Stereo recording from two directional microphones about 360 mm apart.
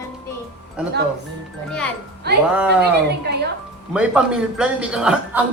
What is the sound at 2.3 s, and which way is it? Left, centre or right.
Speech, right.